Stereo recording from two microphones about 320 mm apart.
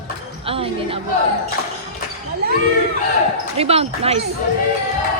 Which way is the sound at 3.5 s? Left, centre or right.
Centre.